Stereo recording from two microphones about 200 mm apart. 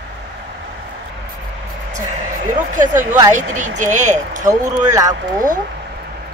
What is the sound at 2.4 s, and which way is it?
Speech, 40° right (ahead or behind).